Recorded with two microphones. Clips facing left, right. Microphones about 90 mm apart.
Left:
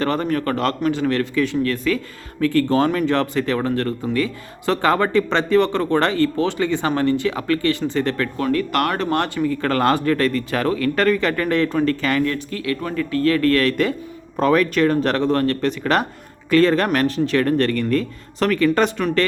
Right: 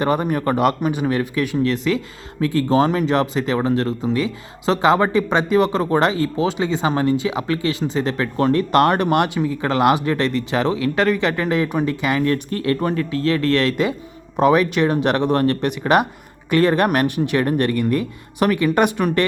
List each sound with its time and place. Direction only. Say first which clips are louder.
0.0 s speech: right 1 dB; 15° right (ahead or behind)
12.3 s speech: right 4 dB; 40° right (ahead or behind)
12.8 s speech: even; 25° right (ahead or behind)